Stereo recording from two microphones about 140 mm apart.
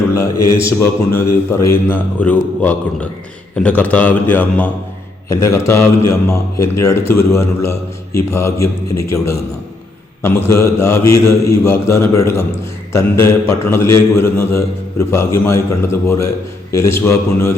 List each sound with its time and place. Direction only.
0.1 s a man's voice: 20° left (ahead or behind)
10.2 s a man's voice: 20° left (ahead or behind)